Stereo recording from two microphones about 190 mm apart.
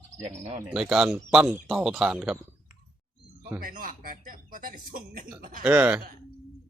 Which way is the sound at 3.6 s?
45° right (ahead or behind).